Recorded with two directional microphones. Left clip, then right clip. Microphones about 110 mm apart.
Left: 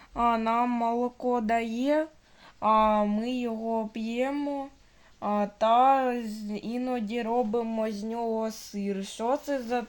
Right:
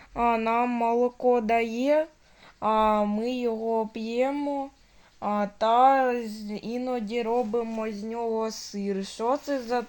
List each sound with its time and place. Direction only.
0.1 s speech: 20° right (ahead or behind)
2.6 s speech: 35° right (ahead or behind); by 7.6 s 5° right (ahead or behind)
7.6 s speech: 10° left (ahead or behind)
8.3 s speech: 25° right (ahead or behind)